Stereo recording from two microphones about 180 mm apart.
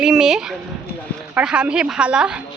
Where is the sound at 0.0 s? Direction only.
5° right (ahead or behind).